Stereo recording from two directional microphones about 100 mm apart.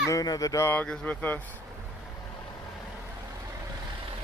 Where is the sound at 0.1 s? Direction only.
35° left (ahead or behind).